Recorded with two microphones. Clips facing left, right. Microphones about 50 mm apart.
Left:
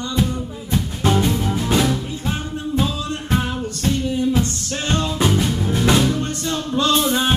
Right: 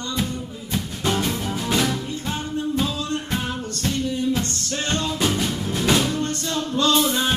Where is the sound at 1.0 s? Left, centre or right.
Centre.